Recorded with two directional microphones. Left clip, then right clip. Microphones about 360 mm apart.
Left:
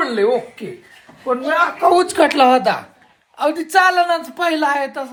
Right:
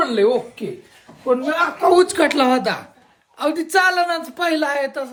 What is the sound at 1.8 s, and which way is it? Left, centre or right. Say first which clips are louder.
A woman's voice: even; centre.